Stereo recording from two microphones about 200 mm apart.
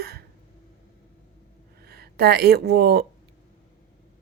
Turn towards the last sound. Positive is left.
turn(degrees=-50)  # may be behind; listen again after turning